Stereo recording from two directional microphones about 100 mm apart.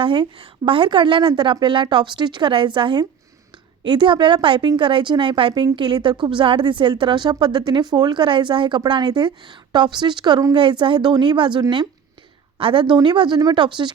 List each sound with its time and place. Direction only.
0.0 s a woman's voice: 60° right (ahead or behind)
12.5 s speech: 65° right (ahead or behind)
12.8 s speech: 50° right (ahead or behind)